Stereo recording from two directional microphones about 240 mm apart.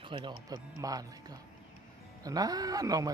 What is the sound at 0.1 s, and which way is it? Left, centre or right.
Speech, centre.